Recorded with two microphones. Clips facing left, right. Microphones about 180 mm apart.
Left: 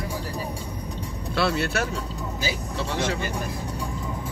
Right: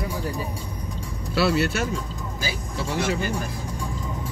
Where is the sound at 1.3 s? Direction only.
5° right (ahead or behind).